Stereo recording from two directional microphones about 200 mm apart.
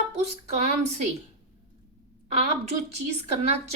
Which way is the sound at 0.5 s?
35° right (ahead or behind).